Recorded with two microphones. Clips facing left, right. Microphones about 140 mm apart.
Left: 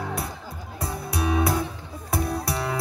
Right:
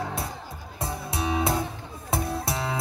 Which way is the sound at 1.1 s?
25° right (ahead or behind).